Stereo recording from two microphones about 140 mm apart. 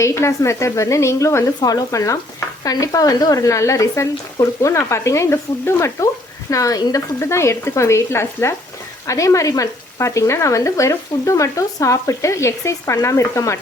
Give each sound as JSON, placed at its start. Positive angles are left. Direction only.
{"t": 0.0, "sound": "speech", "side_deg": 20}